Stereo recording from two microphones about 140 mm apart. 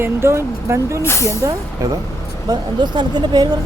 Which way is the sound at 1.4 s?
25° right (ahead or behind).